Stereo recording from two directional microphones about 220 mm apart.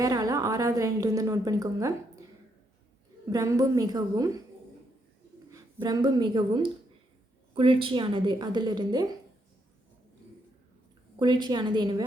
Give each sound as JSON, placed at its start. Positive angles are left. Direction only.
{"t": 0.0, "sound": "a woman's voice", "side_deg": -15}
{"t": 3.2, "sound": "a woman's voice", "side_deg": -15}
{"t": 5.5, "sound": "a woman's voice", "side_deg": -15}
{"t": 11.2, "sound": "a woman's voice", "side_deg": -20}